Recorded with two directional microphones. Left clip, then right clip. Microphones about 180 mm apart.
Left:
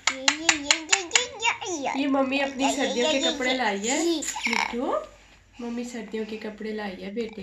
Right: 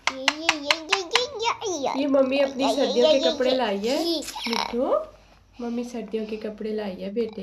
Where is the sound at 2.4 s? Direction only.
65° right (ahead or behind).